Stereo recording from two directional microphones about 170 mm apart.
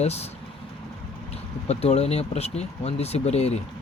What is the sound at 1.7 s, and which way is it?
Speech, 40° left (ahead or behind).